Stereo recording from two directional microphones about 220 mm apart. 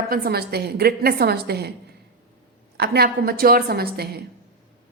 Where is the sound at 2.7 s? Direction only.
45° right (ahead or behind).